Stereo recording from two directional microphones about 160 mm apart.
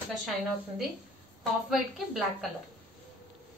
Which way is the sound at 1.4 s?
Centre (ahead or behind).